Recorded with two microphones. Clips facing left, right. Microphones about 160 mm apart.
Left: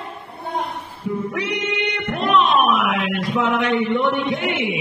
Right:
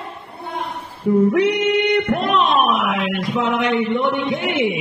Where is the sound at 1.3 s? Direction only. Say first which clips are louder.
Right 8 dB; 55° right (ahead or behind).